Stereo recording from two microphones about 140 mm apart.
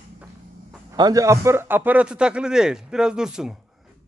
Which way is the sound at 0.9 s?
25° right (ahead or behind).